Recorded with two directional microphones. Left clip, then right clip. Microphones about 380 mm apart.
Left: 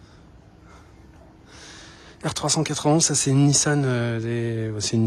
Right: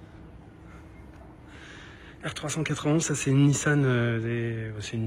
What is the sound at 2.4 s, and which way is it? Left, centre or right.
Speech, centre.